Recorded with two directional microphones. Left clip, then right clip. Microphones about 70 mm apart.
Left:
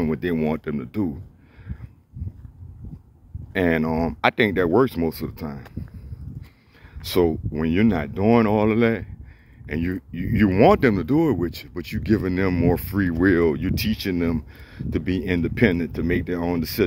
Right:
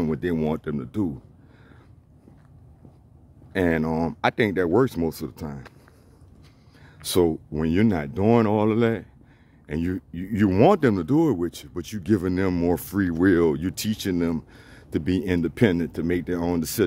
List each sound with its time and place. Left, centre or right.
0.1 s speech: centre
3.5 s speech: centre
3.8 s speech: right
4.2 s speech: centre
7.0 s speech: right
8.5 s speech: right
9.7 s speech: right
10.1 s speech: centre
11.5 s speech: right
12.4 s speech: right
13.4 s speech: right
15.0 s speech: right
15.3 s speech: right
16.3 s speech: right